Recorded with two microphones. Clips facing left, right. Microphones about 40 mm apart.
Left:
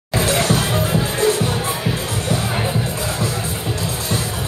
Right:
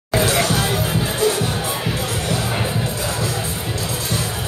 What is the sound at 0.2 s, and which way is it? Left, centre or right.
Music, right.